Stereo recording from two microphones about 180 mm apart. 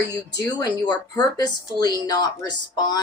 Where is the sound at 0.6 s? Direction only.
20° left (ahead or behind).